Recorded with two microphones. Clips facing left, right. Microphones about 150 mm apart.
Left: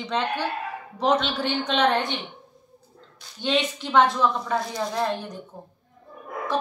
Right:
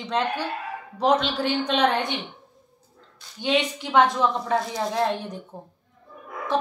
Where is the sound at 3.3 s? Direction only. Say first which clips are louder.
Right 1 dB; 10° right (ahead or behind).